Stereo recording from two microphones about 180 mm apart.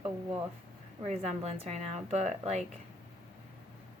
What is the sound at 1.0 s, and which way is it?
A woman's voice, 35° right (ahead or behind).